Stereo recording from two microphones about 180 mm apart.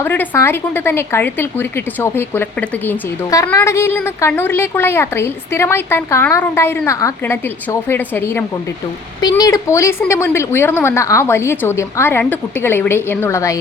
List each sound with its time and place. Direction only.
0.0 s a woman's voice: 10° left (ahead or behind)